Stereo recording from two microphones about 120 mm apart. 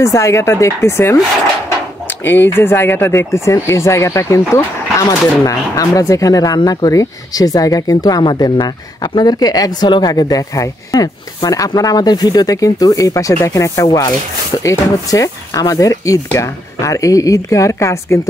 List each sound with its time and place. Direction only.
0.0 s speech: 25° left (ahead or behind)
2.2 s speech: 20° left (ahead or behind)